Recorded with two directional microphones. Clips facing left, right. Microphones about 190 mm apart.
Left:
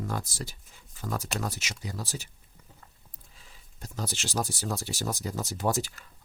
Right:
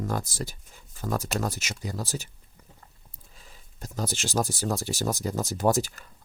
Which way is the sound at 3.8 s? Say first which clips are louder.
Right 4 dB; 45° right (ahead or behind).